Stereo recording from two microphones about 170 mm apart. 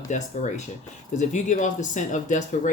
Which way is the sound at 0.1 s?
45° left (ahead or behind).